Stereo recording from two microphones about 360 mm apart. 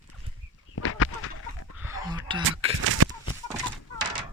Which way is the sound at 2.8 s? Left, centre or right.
Right.